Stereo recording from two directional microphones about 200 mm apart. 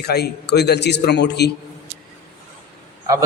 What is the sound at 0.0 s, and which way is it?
A man's voice, 55° left (ahead or behind).